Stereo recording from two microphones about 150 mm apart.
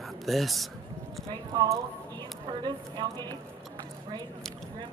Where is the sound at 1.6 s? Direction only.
25° right (ahead or behind).